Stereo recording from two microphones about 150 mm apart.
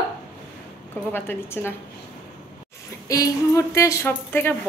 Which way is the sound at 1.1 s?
15° left (ahead or behind).